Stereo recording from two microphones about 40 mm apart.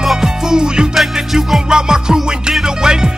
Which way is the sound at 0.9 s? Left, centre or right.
Centre.